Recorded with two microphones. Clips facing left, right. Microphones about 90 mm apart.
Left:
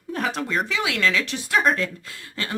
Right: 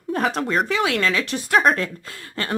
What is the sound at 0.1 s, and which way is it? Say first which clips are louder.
A woman's voice: right 4 dB; 40° right (ahead or behind).